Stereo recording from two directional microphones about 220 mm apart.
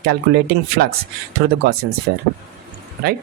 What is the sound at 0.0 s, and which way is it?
Speech, 45° right (ahead or behind).